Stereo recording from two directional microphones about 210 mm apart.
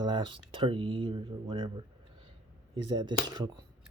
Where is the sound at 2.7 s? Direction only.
20° right (ahead or behind).